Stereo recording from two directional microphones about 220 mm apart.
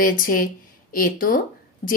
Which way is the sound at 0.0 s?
40° left (ahead or behind).